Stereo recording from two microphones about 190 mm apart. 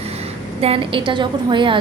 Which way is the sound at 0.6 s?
30° right (ahead or behind).